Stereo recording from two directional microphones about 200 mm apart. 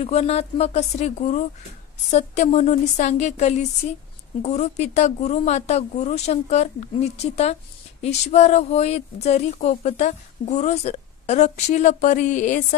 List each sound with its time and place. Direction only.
0.0 s speech: 30° left (ahead or behind)